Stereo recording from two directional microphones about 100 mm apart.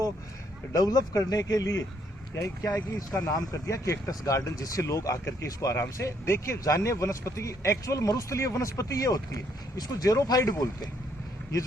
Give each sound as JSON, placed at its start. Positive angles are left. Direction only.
{"t": 0.7, "sound": "speech", "side_deg": 35}